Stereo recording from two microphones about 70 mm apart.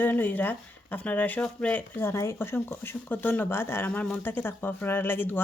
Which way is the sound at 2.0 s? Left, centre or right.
Left.